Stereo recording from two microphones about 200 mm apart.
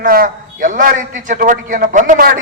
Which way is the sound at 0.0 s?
45° right (ahead or behind).